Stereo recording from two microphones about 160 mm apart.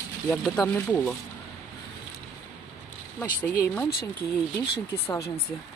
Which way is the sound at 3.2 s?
15° left (ahead or behind).